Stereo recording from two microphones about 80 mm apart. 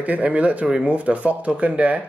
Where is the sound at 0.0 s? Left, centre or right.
Centre.